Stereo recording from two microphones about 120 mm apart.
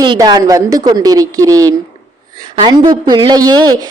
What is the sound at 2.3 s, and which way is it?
Speech, 40° right (ahead or behind).